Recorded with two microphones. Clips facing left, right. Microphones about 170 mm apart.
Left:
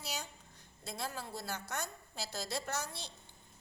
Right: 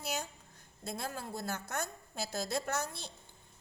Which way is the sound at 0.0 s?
50° right (ahead or behind).